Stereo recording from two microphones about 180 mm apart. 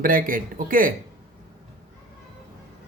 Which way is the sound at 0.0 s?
50° right (ahead or behind).